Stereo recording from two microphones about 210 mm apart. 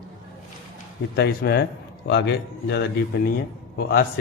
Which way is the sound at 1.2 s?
50° left (ahead or behind).